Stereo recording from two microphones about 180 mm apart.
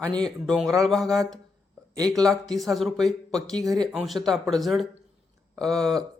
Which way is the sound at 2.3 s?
Centre (ahead or behind).